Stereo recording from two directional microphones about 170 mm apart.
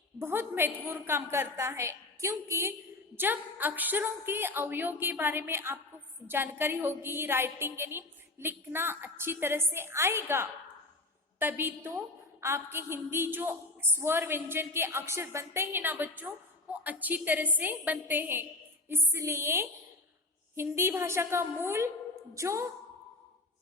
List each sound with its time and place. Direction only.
0.2 s a woman's voice: 15° right (ahead or behind)